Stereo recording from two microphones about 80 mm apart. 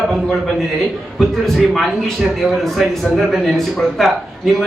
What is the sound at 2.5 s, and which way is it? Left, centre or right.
A man's voice, centre.